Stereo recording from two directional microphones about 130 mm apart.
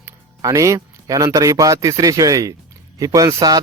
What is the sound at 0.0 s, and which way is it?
A man's voice, 25° right (ahead or behind).